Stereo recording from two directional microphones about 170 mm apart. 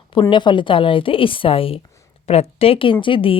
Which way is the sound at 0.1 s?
30° left (ahead or behind).